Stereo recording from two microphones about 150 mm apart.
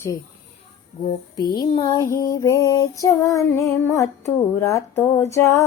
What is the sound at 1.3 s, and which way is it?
Female singing, 25° left (ahead or behind).